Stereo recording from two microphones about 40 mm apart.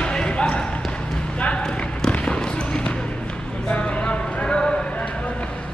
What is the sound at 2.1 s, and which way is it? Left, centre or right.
Basketball bounce, left.